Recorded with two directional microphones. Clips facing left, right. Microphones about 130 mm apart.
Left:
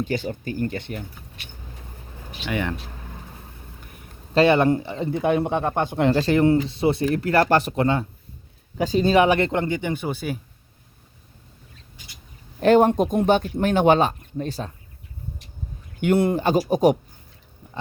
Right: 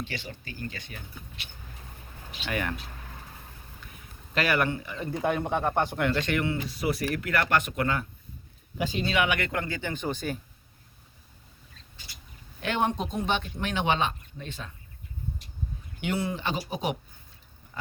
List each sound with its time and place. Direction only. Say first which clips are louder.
0.0 s speech: left 12 dB; 45° left (ahead or behind); by 1.0 s 60° left (ahead or behind)
2.5 s speech: left 5 dB; 20° left (ahead or behind)
4.4 s speech: left 10 dB; 25° left (ahead or behind)
6.1 s speech: left 10 dB; 30° left (ahead or behind)
8.8 s speech: left 9 dB; 40° left (ahead or behind); by 10.4 s 10° left (ahead or behind)
12.5 s speech: left 12 dB; 40° left (ahead or behind)
16.0 s speech: left 11 dB; 55° left (ahead or behind)